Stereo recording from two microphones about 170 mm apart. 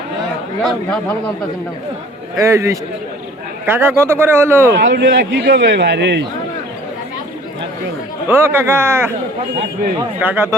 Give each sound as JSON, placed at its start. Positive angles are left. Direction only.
{"t": 2.4, "sound": "speech", "side_deg": -15}
{"t": 4.8, "sound": "a man's voice", "side_deg": -90}
{"t": 8.3, "sound": "speech", "side_deg": -15}
{"t": 10.2, "sound": "speech", "side_deg": -10}